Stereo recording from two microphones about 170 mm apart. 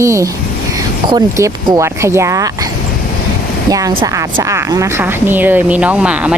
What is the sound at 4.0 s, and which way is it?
Speech, 30° right (ahead or behind).